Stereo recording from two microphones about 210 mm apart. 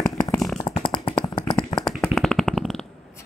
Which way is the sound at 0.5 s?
25° left (ahead or behind).